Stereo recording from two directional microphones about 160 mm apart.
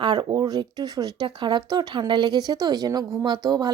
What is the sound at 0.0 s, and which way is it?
A woman's voice, 30° right (ahead or behind).